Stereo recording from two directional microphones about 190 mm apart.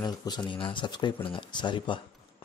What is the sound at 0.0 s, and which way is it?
Speech, 20° left (ahead or behind).